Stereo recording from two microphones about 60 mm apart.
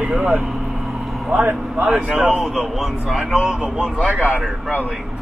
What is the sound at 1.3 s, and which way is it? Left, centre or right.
Speech, right.